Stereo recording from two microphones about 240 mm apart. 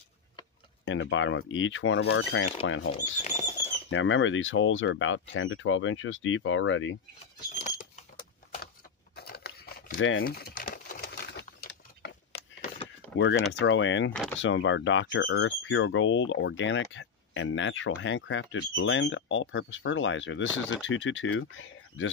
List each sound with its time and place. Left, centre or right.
0.8 s speech: left
3.3 s bird flight: centre
3.9 s speech: left
7.5 s a sound: left
9.9 s speech: left
10.2 s typewriter: left
12.0 s a sound: left
12.4 s a sound: left
13.2 s speech: left
14.1 s speech: centre
14.4 s speech: left